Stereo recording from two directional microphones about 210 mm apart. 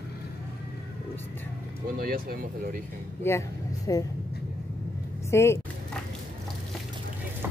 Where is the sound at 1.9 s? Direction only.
45° right (ahead or behind).